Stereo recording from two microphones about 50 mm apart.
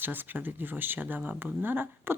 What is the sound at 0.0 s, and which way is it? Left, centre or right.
Speech, right.